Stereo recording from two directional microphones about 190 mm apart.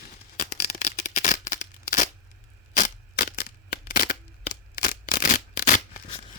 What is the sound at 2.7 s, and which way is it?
Crushing, 40° left (ahead or behind).